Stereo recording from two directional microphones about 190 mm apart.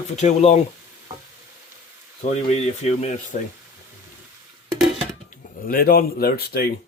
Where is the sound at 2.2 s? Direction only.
35° left (ahead or behind).